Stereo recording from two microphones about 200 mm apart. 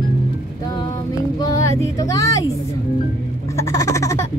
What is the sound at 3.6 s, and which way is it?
Baby laughter, 15° left (ahead or behind).